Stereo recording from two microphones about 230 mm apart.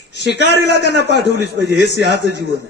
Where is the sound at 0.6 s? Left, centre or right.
Left.